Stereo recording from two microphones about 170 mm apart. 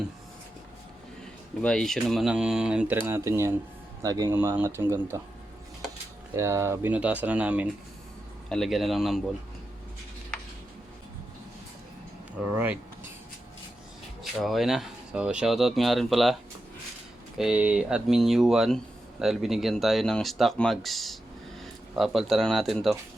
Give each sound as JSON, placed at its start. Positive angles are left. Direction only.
{"t": 1.6, "sound": "speech", "side_deg": 5}
{"t": 6.3, "sound": "speech", "side_deg": -15}
{"t": 8.4, "sound": "speech", "side_deg": 0}
{"t": 12.5, "sound": "speech", "side_deg": -10}
{"t": 14.3, "sound": "speech", "side_deg": 0}